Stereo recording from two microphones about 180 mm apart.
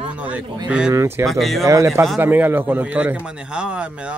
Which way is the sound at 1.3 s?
Centre (ahead or behind).